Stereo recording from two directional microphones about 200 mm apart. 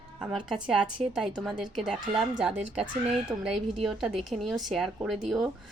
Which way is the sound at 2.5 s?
30° right (ahead or behind).